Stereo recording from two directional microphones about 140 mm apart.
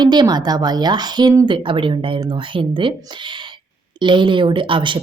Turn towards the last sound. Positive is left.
turn(degrees=-35)  # may be behind; listen again after turning